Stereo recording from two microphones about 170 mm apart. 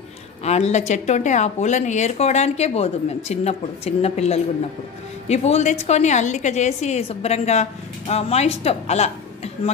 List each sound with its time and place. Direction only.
0.4 s speech: 40° left (ahead or behind)